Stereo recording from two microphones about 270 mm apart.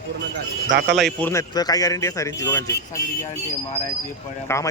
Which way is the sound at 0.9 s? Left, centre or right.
Centre.